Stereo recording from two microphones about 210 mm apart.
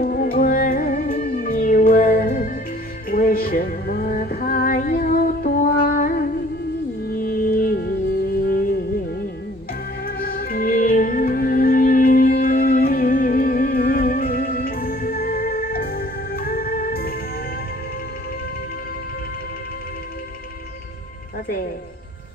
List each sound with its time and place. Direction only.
0.0 s music: 45° left (ahead or behind)
10.0 s music: 45° left (ahead or behind)